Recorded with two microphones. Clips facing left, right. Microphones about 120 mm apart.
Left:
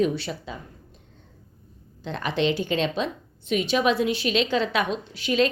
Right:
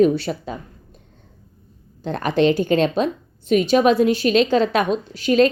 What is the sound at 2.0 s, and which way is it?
A woman's voice, 45° right (ahead or behind).